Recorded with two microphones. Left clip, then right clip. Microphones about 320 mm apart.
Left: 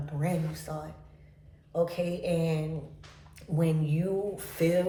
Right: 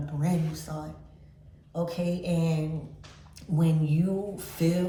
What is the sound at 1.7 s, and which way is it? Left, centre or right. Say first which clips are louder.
Speech: left 3 dB; centre.